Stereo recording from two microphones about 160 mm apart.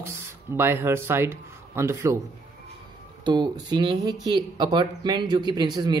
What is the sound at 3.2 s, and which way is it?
Speech, 25° right (ahead or behind).